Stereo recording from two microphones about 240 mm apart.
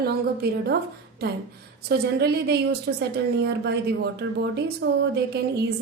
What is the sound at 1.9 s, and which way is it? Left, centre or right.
A woman's voice, right.